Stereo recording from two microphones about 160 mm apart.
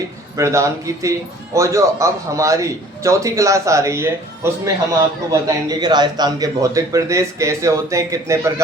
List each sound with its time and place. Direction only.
0.3 s a man's voice: 20° right (ahead or behind)